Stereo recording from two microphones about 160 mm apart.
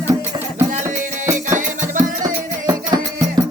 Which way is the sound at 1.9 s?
55° right (ahead or behind).